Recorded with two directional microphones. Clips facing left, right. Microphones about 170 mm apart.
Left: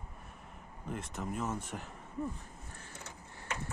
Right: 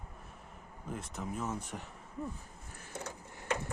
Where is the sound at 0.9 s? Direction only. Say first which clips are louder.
Left 1 dB; centre (ahead or behind).